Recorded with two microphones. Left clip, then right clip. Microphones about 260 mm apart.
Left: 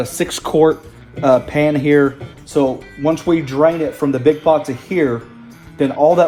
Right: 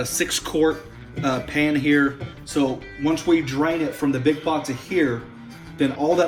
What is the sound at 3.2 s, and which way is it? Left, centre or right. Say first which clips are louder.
Speech: left 5 dB; left.